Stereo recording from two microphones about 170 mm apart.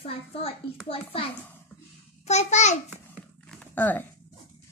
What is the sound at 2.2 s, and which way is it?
Speech, 40° left (ahead or behind).